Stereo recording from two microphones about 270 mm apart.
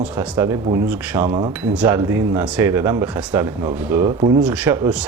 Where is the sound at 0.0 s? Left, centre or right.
Centre.